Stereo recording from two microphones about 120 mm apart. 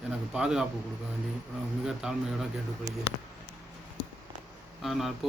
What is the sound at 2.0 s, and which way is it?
Speech, 5° right (ahead or behind).